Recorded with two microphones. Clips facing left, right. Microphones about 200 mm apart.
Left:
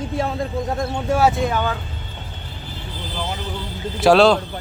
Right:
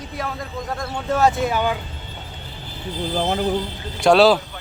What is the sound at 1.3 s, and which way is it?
Speech, 5° right (ahead or behind).